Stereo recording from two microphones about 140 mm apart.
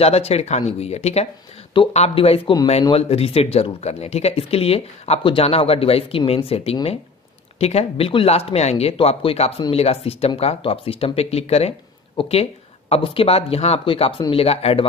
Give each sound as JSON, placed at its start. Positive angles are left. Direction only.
{"t": 0.0, "sound": "speech", "side_deg": 45}